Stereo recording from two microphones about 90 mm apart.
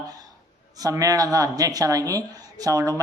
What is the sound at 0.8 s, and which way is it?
Speech, 40° right (ahead or behind).